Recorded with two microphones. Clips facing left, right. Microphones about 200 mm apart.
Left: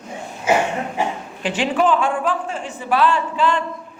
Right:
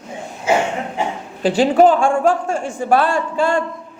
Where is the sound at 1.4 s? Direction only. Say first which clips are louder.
Right 7 dB; 40° right (ahead or behind).